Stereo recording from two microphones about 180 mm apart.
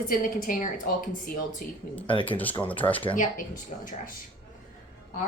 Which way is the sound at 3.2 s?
45° left (ahead or behind).